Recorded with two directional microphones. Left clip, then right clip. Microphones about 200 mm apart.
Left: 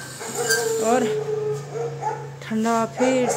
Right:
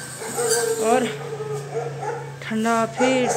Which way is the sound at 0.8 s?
20° left (ahead or behind).